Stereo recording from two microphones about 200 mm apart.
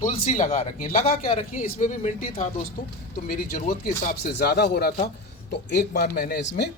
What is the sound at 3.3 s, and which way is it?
A man's voice, 50° left (ahead or behind).